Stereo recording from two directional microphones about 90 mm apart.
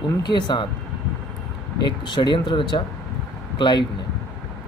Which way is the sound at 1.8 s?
60° left (ahead or behind).